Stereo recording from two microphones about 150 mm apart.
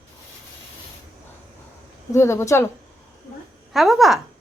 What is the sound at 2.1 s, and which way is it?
Speech, 20° left (ahead or behind).